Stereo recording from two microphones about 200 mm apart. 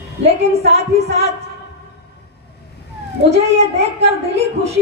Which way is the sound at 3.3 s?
30° right (ahead or behind).